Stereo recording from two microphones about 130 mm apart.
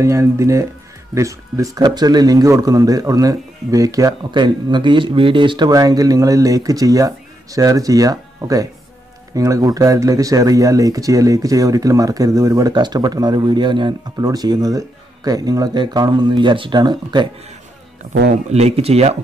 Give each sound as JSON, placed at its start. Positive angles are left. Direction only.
{"t": 0.0, "sound": "speech", "side_deg": -25}
{"t": 5.7, "sound": "speech", "side_deg": -30}
{"t": 18.5, "sound": "speech", "side_deg": -55}